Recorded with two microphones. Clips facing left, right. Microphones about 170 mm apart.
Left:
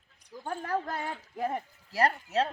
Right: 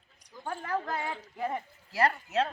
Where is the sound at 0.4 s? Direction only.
40° left (ahead or behind).